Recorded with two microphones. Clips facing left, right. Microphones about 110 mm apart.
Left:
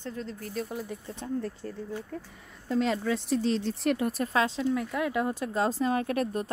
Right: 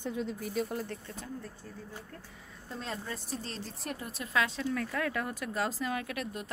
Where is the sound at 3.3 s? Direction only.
Centre (ahead or behind).